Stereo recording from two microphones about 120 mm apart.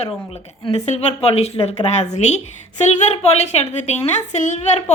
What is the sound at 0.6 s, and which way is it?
A woman's voice, 55° left (ahead or behind).